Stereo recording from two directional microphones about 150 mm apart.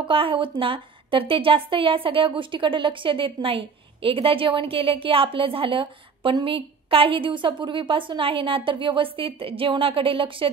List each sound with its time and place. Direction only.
0.0 s a woman's voice: 35° right (ahead or behind)